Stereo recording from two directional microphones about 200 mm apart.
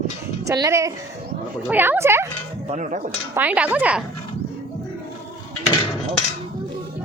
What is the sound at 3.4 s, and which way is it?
Speech, 5° right (ahead or behind).